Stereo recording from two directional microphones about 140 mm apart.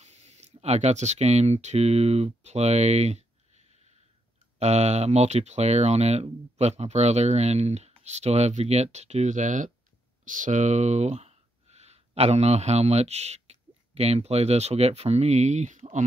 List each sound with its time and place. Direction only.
0.0 s speech: 55° right (ahead or behind)